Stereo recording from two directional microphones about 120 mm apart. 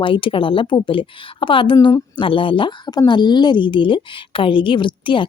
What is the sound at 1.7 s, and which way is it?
Speech, 30° left (ahead or behind).